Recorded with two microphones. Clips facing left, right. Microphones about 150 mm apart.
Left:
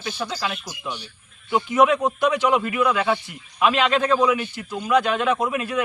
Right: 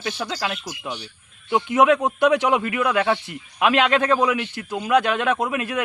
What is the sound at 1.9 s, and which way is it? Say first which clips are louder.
A man's voice: right 3 dB; 60° right (ahead or behind).